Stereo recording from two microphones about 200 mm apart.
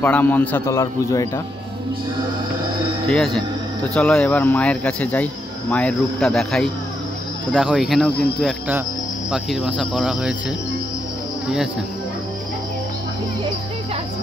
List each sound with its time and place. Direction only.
0.0 s a man's voice: 10° left (ahead or behind)
3.1 s speech: centre (ahead or behind)